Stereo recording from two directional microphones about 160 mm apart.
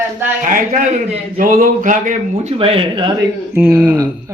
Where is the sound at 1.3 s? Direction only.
60° right (ahead or behind).